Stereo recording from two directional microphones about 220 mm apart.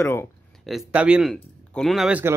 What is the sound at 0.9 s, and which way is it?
A man's voice, 5° right (ahead or behind).